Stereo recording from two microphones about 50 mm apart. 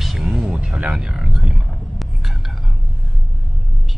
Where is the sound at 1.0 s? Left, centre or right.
Centre.